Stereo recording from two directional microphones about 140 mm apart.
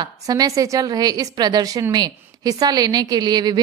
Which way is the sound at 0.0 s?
25° right (ahead or behind).